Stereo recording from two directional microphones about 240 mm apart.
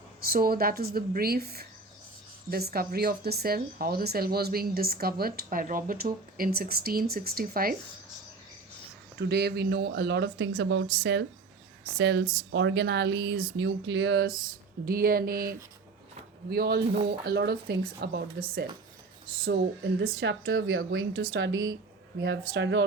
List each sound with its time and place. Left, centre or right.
0.2 s speech: right
9.1 s speech: right